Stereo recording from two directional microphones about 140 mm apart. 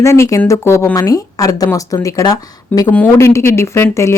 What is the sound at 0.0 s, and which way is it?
Speech, 20° left (ahead or behind).